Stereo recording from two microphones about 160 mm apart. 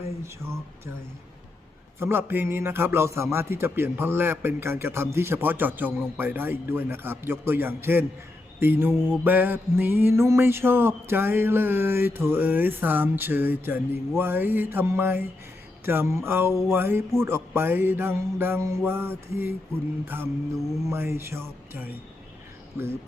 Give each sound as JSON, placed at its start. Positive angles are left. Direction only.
{"t": 0.2, "sound": "a man's voice", "side_deg": -15}
{"t": 2.0, "sound": "a man's voice", "side_deg": -15}